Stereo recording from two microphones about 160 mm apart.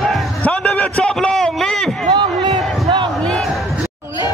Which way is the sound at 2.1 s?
30° right (ahead or behind).